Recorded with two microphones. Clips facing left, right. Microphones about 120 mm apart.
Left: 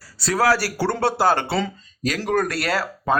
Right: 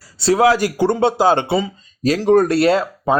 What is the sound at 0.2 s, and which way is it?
A man's voice, 25° right (ahead or behind).